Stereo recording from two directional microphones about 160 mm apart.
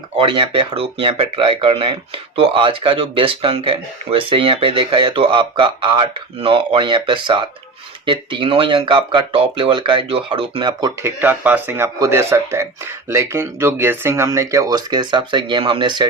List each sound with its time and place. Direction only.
0.2 s speech: 30° right (ahead or behind)
11.0 s speech: 10° right (ahead or behind); by 16.0 s 30° right (ahead or behind)